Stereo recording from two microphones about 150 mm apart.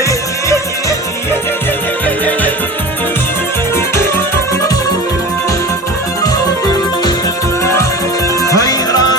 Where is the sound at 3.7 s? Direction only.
15° left (ahead or behind).